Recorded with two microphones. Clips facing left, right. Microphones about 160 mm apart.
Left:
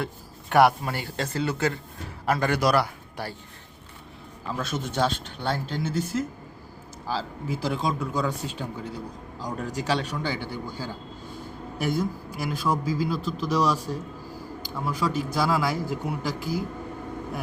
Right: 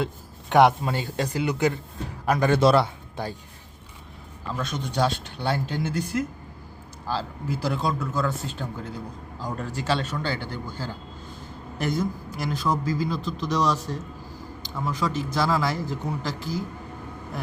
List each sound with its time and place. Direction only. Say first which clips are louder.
0.5 s a man's voice: right 1 dB; 20° right (ahead or behind)
4.4 s a man's voice: even; 5° left (ahead or behind)
9.7 s a man's voice: right 1 dB; 10° left (ahead or behind)